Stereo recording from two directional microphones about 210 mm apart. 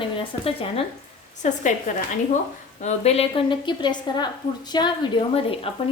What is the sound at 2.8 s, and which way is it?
A woman's voice, 30° left (ahead or behind).